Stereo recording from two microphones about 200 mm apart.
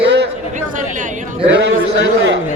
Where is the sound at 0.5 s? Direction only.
40° right (ahead or behind).